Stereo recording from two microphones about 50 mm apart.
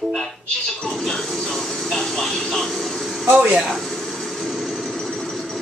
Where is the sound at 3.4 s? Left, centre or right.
Centre.